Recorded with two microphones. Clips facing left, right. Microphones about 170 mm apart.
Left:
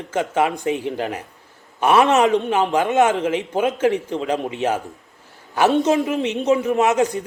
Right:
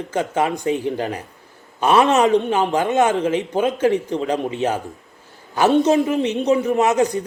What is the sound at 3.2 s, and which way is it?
A man's voice, 35° right (ahead or behind).